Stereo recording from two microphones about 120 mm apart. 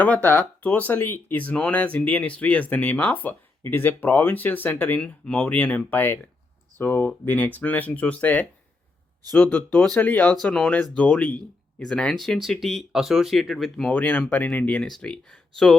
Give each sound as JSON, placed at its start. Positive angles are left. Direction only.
{"t": 0.0, "sound": "speech", "side_deg": 15}